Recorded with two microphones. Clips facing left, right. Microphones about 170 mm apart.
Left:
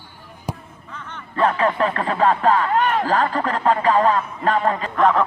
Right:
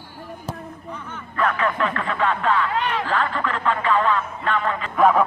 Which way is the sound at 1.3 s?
30° left (ahead or behind).